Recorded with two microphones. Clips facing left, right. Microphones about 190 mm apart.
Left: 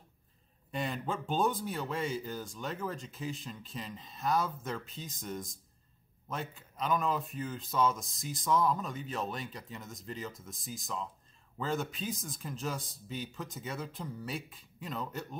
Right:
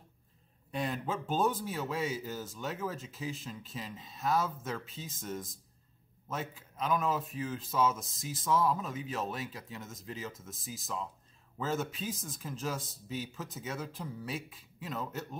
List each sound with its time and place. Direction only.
0.7 s speech: centre (ahead or behind)